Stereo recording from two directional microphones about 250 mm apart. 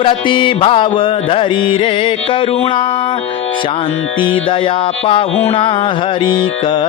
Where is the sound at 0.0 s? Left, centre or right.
Centre.